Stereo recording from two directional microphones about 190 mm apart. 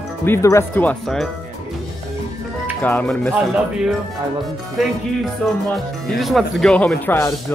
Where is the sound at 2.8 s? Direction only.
10° left (ahead or behind).